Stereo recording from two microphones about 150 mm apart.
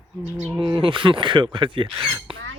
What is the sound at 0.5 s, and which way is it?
Speech, 35° right (ahead or behind).